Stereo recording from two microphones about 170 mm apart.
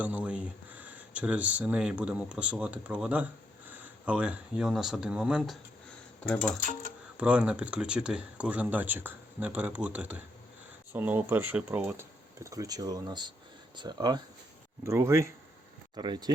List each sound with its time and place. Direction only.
0.0 s speech: 10° right (ahead or behind)
6.1 s speech: 5° left (ahead or behind)
7.2 s speech: 5° right (ahead or behind); by 16.3 s 25° right (ahead or behind)